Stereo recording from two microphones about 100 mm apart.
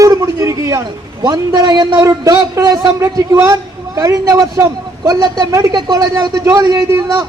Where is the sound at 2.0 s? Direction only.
35° right (ahead or behind).